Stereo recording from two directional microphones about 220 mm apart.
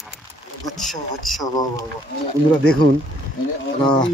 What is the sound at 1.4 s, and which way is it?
Speech, 15° left (ahead or behind).